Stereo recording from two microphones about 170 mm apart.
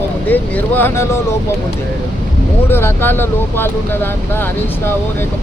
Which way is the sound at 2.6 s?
15° left (ahead or behind).